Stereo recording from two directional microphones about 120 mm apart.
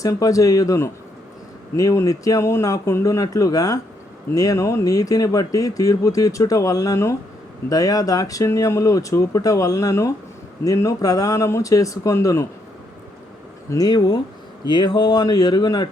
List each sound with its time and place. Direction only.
0.0 s speech: 30° left (ahead or behind)
13.7 s speech: 30° left (ahead or behind)